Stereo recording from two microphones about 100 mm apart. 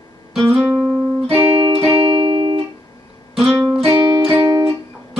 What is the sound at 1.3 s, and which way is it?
Music, 70° right (ahead or behind).